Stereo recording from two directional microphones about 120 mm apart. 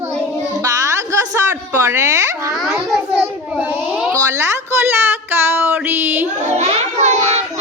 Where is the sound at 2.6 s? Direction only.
10° right (ahead or behind).